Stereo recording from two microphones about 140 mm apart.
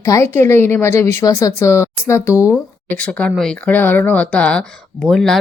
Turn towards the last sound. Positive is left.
turn(degrees=5)  # may be behind; listen again after turning